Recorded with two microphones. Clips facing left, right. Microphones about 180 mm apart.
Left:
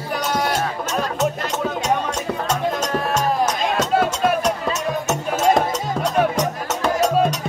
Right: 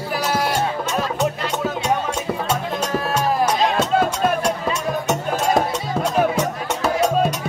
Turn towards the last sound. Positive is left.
turn(degrees=-5)  # may be behind; listen again after turning